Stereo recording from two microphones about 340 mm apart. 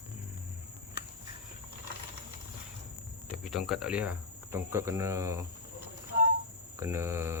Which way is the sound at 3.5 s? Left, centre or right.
Centre.